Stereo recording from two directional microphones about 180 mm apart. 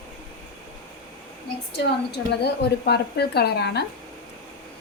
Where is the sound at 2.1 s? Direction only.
65° left (ahead or behind).